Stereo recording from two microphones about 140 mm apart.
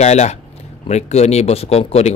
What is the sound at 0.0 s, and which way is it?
Speech, 55° left (ahead or behind).